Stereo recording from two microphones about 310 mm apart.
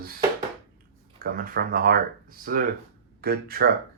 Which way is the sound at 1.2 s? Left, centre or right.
Right.